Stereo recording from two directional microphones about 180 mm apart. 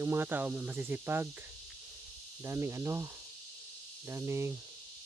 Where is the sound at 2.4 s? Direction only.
15° right (ahead or behind).